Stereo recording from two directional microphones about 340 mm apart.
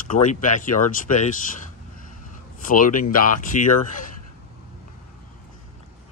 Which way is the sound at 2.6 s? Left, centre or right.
Left.